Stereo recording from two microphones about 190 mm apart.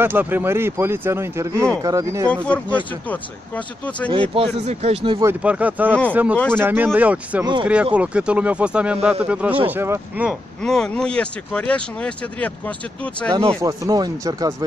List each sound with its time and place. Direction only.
0.0 s speech: 10° right (ahead or behind)
2.2 s speech: 5° left (ahead or behind)
4.3 s speech: 30° right (ahead or behind)
5.2 s speech: 5° right (ahead or behind)
10.6 s speech: 5° left (ahead or behind)
13.3 s speech: 15° right (ahead or behind)